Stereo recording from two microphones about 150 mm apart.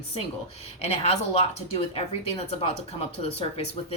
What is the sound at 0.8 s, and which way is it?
A woman's voice, 45° left (ahead or behind).